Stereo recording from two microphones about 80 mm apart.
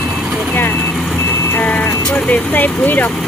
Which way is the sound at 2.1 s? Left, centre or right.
Centre.